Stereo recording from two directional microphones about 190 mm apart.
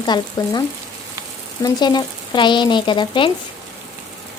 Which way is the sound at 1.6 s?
20° left (ahead or behind).